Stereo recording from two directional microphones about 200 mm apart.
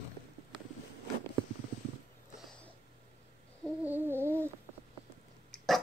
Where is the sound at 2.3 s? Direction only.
Centre (ahead or behind).